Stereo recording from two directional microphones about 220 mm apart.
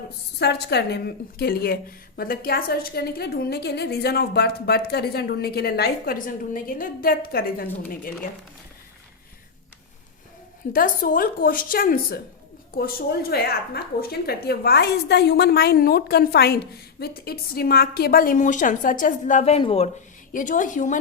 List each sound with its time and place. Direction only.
0.3 s a woman's voice: 50° left (ahead or behind)
10.7 s a woman's voice: 40° left (ahead or behind)